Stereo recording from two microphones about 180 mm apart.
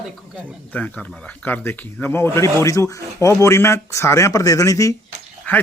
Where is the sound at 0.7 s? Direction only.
10° left (ahead or behind).